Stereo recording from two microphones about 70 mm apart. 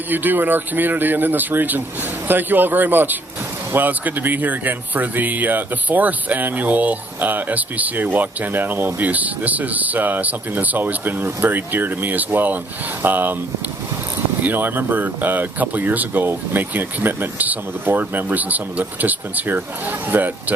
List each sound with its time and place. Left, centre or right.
0.1 s speech: right
14.4 s speech: right